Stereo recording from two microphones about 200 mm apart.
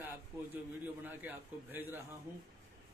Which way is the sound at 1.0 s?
10° right (ahead or behind).